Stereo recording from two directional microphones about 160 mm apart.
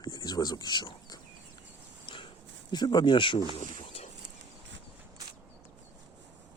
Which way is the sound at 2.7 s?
25° left (ahead or behind).